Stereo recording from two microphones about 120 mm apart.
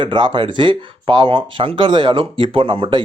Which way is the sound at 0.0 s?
40° right (ahead or behind).